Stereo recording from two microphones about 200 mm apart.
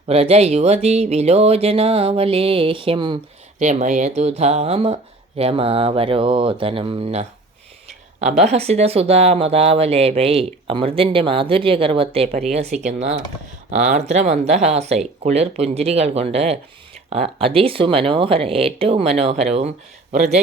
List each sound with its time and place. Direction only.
0.1 s speech: 30° right (ahead or behind)
3.6 s speech: 35° right (ahead or behind)